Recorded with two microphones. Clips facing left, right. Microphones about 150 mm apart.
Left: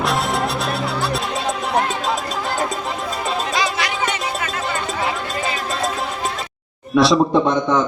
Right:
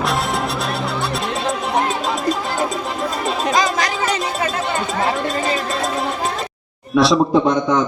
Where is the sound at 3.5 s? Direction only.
45° right (ahead or behind).